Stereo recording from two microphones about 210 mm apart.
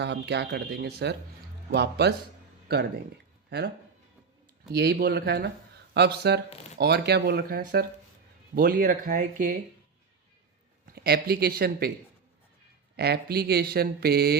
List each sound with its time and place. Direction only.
0.0 s speech: 55° right (ahead or behind)
4.7 s speech: 50° right (ahead or behind)
10.9 s speech: 45° right (ahead or behind)
13.0 s speech: 50° right (ahead or behind)